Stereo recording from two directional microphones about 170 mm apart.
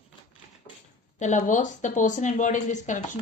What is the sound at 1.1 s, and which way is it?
Speech, 45° left (ahead or behind).